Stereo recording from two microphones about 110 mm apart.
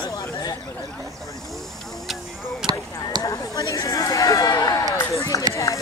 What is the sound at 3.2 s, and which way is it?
Speech, 30° left (ahead or behind).